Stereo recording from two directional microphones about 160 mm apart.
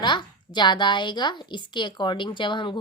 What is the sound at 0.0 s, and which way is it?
A woman's voice, 30° left (ahead or behind).